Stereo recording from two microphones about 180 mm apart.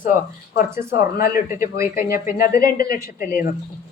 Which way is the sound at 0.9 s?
55° left (ahead or behind).